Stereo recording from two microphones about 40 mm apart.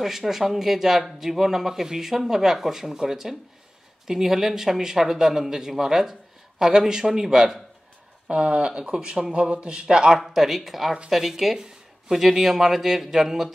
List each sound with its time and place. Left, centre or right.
0.0 s speech: centre
9.4 s speech: right
9.8 s speech: centre
10.0 s speech: centre